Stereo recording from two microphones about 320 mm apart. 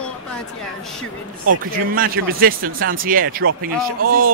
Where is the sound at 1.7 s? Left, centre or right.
Right.